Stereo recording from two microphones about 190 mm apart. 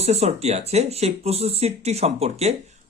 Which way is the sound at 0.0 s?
35° right (ahead or behind).